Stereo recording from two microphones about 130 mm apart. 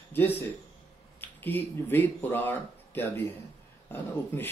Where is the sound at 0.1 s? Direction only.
15° left (ahead or behind).